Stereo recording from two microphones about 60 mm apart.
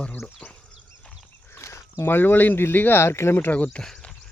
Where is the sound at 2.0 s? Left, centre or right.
Left.